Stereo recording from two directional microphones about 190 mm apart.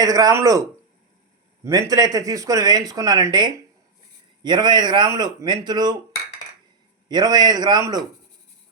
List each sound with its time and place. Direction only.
0.0 s speech: 20° right (ahead or behind)
1.6 s speech: 20° right (ahead or behind)
7.1 s speech: 20° right (ahead or behind)